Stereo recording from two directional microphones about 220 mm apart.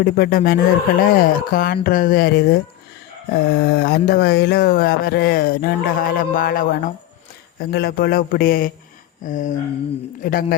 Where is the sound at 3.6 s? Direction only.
45° left (ahead or behind).